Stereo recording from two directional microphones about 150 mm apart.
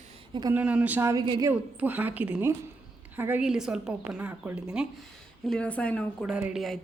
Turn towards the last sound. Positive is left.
turn(degrees=0)  # may be behind; listen again after turning